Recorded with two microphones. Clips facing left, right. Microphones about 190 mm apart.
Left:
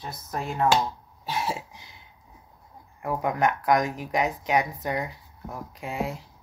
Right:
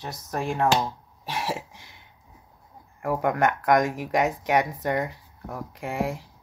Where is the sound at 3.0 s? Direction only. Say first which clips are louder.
Right 2 dB; 60° right (ahead or behind).